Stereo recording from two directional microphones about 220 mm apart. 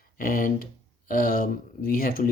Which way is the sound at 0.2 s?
40° left (ahead or behind).